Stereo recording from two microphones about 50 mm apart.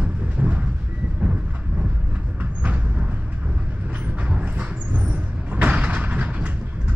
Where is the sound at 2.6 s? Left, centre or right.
Right.